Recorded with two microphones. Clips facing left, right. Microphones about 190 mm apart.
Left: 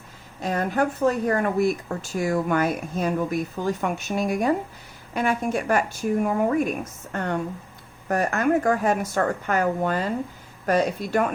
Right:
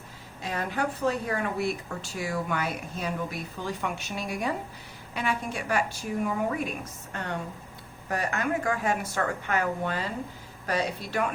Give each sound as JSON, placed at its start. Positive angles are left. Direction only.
{"t": 0.4, "sound": "speech", "side_deg": 45}